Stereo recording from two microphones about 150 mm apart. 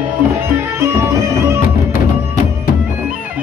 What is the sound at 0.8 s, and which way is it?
Music, 20° right (ahead or behind).